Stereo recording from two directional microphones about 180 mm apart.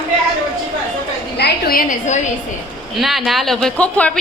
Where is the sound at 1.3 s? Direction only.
60° left (ahead or behind); by 2.2 s 45° left (ahead or behind).